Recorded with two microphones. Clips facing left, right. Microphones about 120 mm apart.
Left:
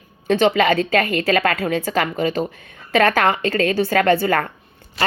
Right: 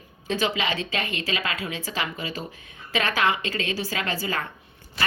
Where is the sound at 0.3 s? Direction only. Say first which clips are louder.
Left 10 dB; 55° left (ahead or behind).